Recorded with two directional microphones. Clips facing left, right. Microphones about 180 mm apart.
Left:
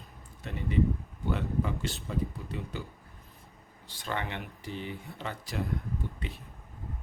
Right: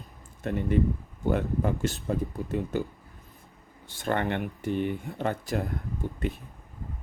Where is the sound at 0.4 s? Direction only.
50° right (ahead or behind).